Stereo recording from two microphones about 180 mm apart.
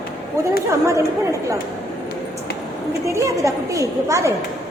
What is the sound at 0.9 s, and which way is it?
Speech, 15° right (ahead or behind).